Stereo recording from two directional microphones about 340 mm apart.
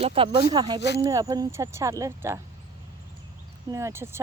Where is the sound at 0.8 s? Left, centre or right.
Left.